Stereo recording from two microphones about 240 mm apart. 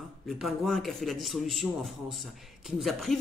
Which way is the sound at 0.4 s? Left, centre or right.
Centre.